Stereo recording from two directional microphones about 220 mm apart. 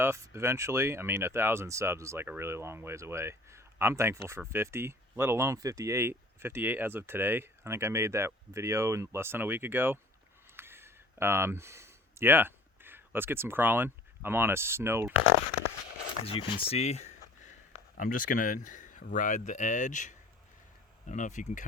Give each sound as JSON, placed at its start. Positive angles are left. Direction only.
{"t": 0.0, "sound": "speech", "side_deg": -10}
{"t": 10.6, "sound": "a sound", "side_deg": -10}
{"t": 16.2, "sound": "speech", "side_deg": 25}